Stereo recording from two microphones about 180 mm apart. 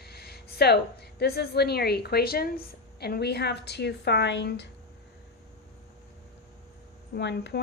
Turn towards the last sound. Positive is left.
turn(degrees=70)  # may be behind; listen again after turning